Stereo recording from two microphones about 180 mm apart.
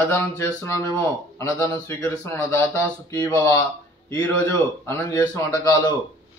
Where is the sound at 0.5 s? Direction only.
10° left (ahead or behind).